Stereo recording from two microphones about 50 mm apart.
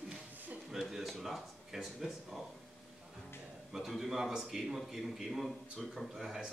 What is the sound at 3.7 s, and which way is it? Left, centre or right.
A man's voice, centre.